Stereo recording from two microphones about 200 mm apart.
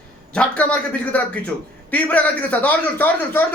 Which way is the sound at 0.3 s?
5° left (ahead or behind).